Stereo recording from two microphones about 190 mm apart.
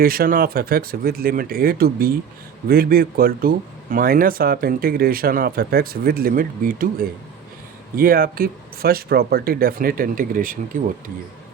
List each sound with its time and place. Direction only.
0.0 s speech: 50° right (ahead or behind)